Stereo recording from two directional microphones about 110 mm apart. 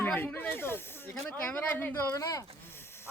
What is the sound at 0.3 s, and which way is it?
Snake, 20° left (ahead or behind).